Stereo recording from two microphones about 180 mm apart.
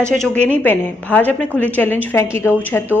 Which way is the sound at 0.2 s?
10° left (ahead or behind).